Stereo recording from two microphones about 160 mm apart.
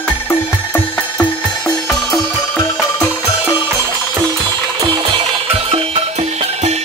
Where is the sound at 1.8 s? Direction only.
Centre (ahead or behind).